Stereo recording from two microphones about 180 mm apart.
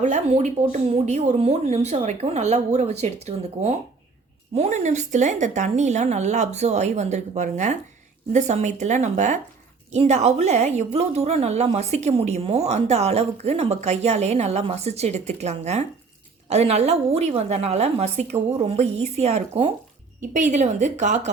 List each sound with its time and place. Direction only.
0.0 s a woman's voice: 40° right (ahead or behind)